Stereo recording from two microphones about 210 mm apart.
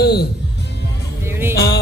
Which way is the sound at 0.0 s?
50° left (ahead or behind).